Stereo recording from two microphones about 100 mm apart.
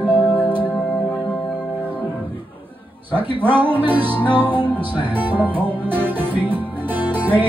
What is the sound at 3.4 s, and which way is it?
Music, 20° right (ahead or behind).